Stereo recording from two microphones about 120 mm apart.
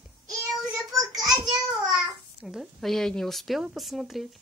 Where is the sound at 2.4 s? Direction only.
5° right (ahead or behind).